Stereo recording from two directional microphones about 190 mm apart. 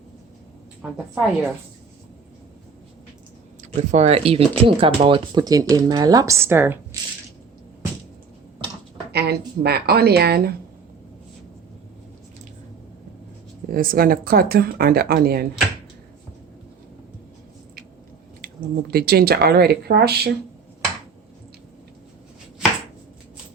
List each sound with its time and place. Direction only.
0.8 s a woman's voice: 5° right (ahead or behind)
3.6 s speech: 35° right (ahead or behind); by 6.7 s 10° right (ahead or behind)
9.1 s speech: 60° right (ahead or behind)
13.7 s speech: 50° right (ahead or behind)
18.4 s speech: 55° right (ahead or behind)